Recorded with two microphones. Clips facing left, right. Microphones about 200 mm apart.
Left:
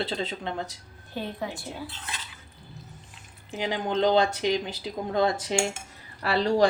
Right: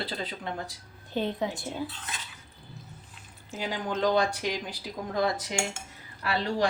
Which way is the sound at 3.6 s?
25° left (ahead or behind).